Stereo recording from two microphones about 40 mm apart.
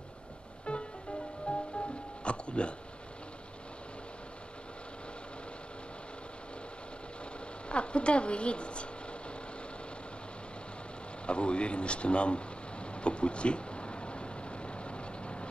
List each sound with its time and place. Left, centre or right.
0.7 s music: left
2.2 s speech: left
7.7 s speech: left
11.2 s speech: left
13.0 s vehicle: left